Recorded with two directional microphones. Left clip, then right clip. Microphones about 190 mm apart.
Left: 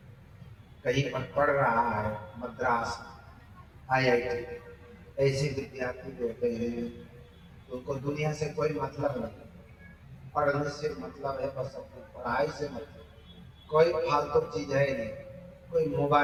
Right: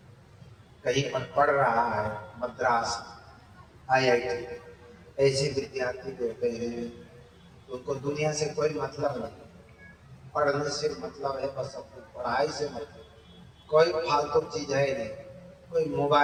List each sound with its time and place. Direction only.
0.9 s a man's voice: 25° right (ahead or behind)
7.9 s a man's voice: 25° right (ahead or behind)
10.3 s a man's voice: 25° right (ahead or behind)